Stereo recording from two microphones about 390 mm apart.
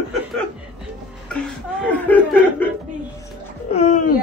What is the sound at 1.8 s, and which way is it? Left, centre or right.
Speech, centre.